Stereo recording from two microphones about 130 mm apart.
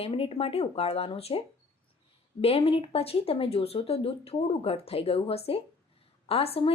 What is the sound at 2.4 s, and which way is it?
Speech, 50° left (ahead or behind).